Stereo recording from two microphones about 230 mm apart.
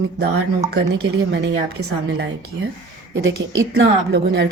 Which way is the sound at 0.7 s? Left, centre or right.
Right.